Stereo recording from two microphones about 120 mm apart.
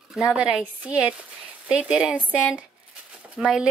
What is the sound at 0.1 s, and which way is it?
A woman's voice, 5° right (ahead or behind).